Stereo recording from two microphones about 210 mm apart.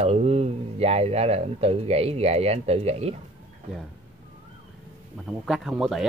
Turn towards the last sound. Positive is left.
turn(degrees=0)  # may be behind; listen again after turning